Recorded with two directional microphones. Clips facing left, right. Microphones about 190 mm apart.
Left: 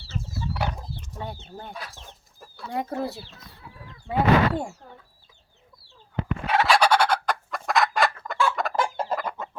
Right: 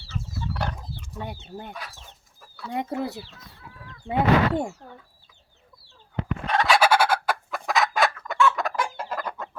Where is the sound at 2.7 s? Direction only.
20° right (ahead or behind).